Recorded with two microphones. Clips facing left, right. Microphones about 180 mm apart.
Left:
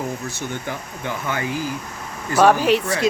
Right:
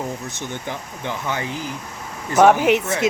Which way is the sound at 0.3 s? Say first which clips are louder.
Left 1 dB; 20° right (ahead or behind).